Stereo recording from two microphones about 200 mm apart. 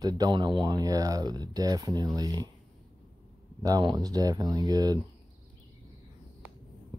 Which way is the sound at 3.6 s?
20° right (ahead or behind).